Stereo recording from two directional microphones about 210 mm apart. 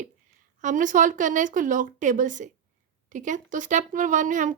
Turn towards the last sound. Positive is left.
turn(degrees=-35)  # may be behind; listen again after turning